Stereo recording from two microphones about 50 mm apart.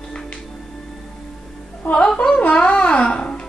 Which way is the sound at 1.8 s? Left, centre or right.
Left.